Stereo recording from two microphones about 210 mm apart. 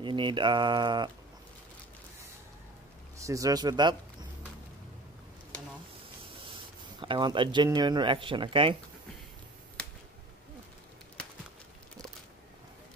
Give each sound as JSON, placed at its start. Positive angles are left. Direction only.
{"t": 0.0, "sound": "speech", "side_deg": -20}
{"t": 3.2, "sound": "speech", "side_deg": -15}
{"t": 7.0, "sound": "speech", "side_deg": -20}